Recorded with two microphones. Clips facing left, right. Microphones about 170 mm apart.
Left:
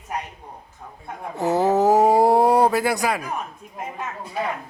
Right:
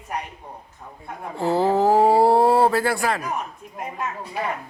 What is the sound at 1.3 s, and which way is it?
Speech, 15° left (ahead or behind).